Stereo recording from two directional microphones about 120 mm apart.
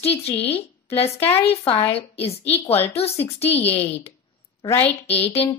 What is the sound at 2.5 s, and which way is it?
Speech, 20° left (ahead or behind).